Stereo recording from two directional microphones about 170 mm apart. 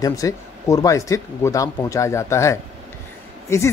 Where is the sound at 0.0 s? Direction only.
20° left (ahead or behind).